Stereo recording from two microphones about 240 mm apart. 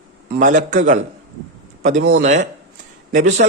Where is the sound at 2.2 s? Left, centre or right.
Right.